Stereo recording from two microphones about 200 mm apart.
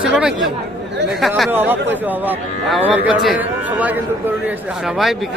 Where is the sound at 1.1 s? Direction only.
Centre (ahead or behind).